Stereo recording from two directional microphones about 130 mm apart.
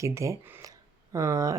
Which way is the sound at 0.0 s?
25° right (ahead or behind).